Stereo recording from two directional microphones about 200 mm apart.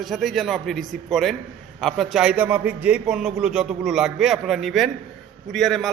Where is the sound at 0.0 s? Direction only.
Centre (ahead or behind).